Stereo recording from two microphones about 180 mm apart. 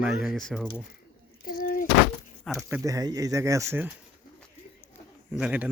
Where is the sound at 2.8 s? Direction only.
20° right (ahead or behind).